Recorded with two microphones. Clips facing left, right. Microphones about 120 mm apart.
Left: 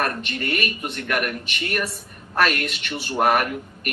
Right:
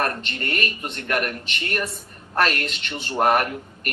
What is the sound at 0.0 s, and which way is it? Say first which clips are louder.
A woman's voice: even; 30° right (ahead or behind).